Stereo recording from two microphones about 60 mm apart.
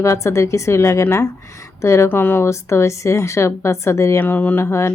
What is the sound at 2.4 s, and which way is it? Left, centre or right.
A woman's voice, left.